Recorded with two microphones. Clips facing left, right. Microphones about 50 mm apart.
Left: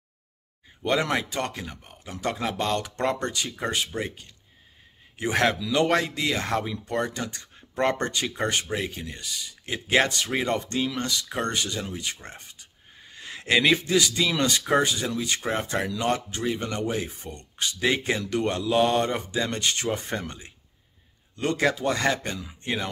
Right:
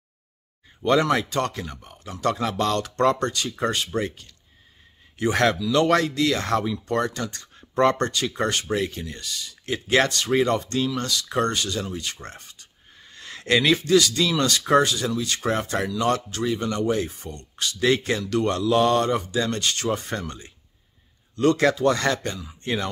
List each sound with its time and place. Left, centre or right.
0.8 s speech: centre
1.1 s speech: centre
10.9 s speech: left
11.2 s speech: centre
11.5 s speech: centre